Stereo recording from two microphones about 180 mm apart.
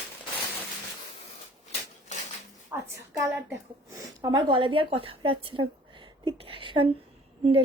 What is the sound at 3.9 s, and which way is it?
Speech, 20° right (ahead or behind).